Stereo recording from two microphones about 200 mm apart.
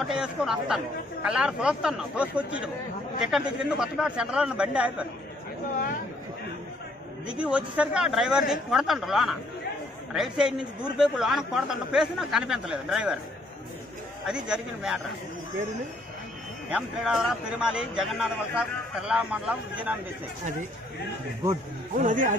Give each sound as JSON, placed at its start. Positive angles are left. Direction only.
{"t": 0.1, "sound": "a man's voice", "side_deg": -5}
{"t": 7.2, "sound": "a man's voice", "side_deg": -5}
{"t": 14.2, "sound": "a man's voice", "side_deg": -5}
{"t": 16.7, "sound": "a man's voice", "side_deg": -5}
{"t": 21.9, "sound": "a man's voice", "side_deg": -40}